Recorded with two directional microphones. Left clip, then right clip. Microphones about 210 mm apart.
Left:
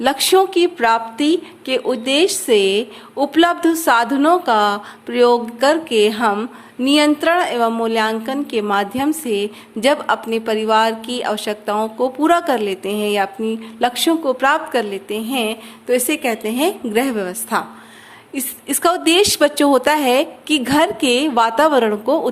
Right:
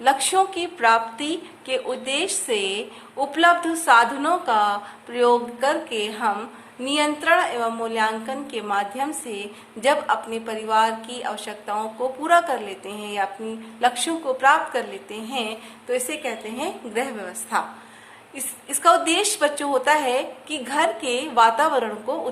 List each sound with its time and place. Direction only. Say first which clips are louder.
0.0 s speech: left 5 dB; 40° left (ahead or behind)